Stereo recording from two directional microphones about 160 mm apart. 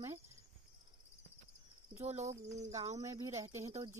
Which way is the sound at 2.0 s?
40° right (ahead or behind).